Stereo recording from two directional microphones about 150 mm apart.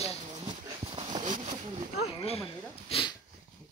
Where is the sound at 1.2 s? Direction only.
50° right (ahead or behind).